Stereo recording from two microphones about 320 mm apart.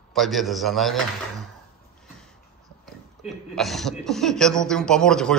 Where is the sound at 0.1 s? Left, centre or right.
Centre.